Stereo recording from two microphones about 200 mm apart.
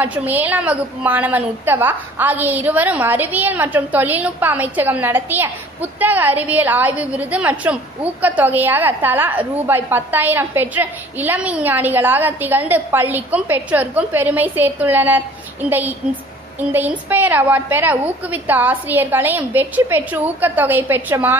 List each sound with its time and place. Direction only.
0.0 s a woman's voice: 10° right (ahead or behind)
16.5 s a woman's voice: 10° right (ahead or behind)